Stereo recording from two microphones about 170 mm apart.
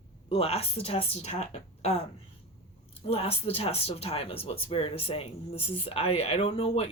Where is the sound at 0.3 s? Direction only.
35° left (ahead or behind).